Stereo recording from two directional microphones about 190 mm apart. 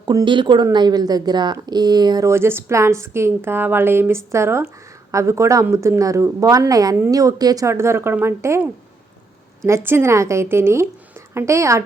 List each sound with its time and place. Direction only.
0.0 s speech: 20° right (ahead or behind)